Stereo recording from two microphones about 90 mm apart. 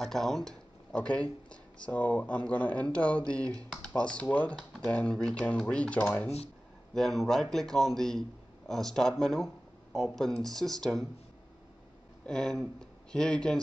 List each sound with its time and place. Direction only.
0.0 s speech: 5° left (ahead or behind)
6.9 s a man's voice: 5° left (ahead or behind)
12.3 s speech: 5° left (ahead or behind)